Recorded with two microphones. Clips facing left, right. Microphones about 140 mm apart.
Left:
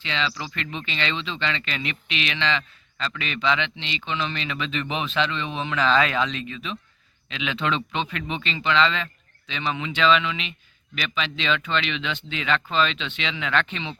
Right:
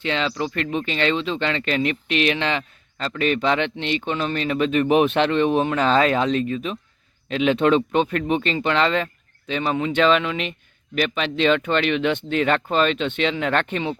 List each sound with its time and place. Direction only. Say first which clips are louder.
0.0 s a man's voice: right 6 dB; 50° right (ahead or behind)